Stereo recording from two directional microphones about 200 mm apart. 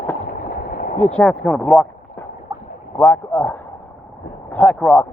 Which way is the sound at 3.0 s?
10° left (ahead or behind).